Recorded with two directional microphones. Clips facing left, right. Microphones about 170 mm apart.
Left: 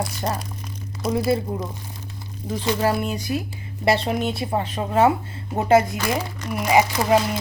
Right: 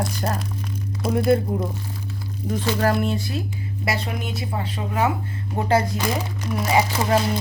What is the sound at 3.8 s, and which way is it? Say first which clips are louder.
Speech: left 7 dB; 25° left (ahead or behind).